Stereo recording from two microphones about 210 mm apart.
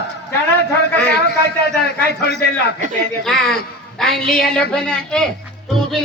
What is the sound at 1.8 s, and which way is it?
Speech, 50° left (ahead or behind).